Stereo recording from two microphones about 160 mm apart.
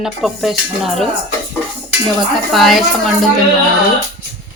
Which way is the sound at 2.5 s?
Centre (ahead or behind).